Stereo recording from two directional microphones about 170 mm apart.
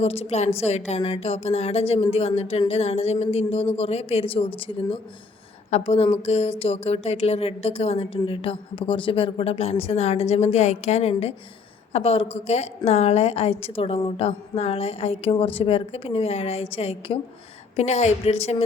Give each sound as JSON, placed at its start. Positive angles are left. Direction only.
{"t": 0.0, "sound": "a woman's voice", "side_deg": 35}